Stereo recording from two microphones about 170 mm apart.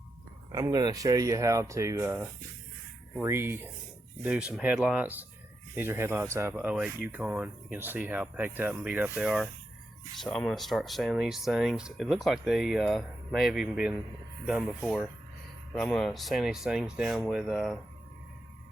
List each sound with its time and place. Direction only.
0.5 s speech: 20° right (ahead or behind); by 17.7 s centre (ahead or behind)